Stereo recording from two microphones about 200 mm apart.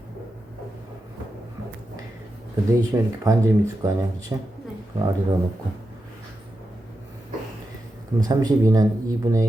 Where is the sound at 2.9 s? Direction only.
15° right (ahead or behind).